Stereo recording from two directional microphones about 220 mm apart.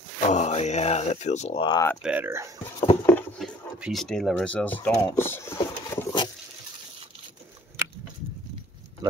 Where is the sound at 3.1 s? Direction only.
5° left (ahead or behind).